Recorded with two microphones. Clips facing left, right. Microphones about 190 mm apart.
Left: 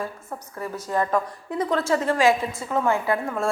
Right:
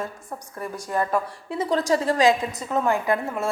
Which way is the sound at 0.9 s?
10° right (ahead or behind).